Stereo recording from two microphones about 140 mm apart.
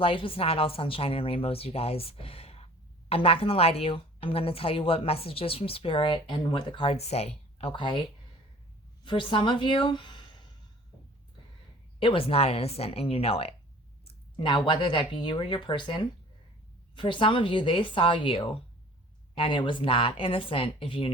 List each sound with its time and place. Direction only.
0.0 s a woman's voice: 40° left (ahead or behind)
9.0 s a woman's voice: 35° left (ahead or behind)
11.9 s a woman's voice: 40° left (ahead or behind)